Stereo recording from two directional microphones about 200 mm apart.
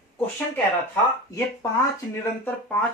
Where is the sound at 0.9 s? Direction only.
15° left (ahead or behind).